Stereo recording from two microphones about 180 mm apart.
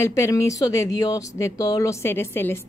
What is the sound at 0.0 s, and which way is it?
Speech, 15° left (ahead or behind).